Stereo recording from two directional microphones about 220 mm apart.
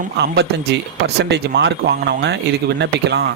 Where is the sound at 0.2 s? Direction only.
50° right (ahead or behind).